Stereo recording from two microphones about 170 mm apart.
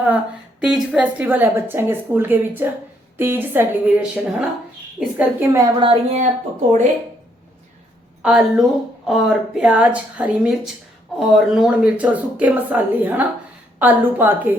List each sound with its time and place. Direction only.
0.6 s a woman's voice: 5° right (ahead or behind)
5.8 s speech: 35° right (ahead or behind)
8.2 s a woman's voice: centre (ahead or behind)